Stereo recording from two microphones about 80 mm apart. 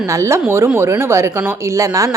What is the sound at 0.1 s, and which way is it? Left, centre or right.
Speech, right.